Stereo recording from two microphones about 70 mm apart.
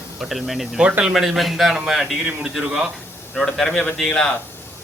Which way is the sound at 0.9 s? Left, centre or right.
Centre.